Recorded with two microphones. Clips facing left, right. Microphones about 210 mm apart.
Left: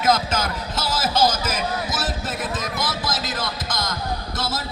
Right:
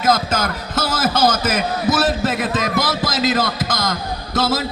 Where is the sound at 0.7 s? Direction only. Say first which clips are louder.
Right 5 dB; 50° right (ahead or behind).